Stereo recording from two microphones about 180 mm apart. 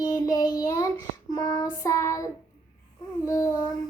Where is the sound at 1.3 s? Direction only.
20° left (ahead or behind).